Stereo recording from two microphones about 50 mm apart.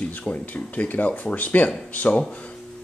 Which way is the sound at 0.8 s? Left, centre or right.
Left.